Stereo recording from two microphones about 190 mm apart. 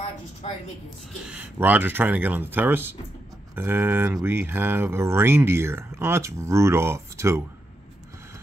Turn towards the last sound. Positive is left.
turn(degrees=-15)  # may be behind; listen again after turning